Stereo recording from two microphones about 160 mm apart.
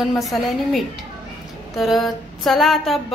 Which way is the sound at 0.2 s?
Centre (ahead or behind).